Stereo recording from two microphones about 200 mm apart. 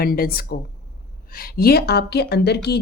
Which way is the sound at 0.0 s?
50° left (ahead or behind).